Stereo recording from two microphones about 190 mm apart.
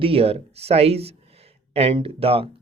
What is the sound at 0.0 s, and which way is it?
Speech, 30° right (ahead or behind).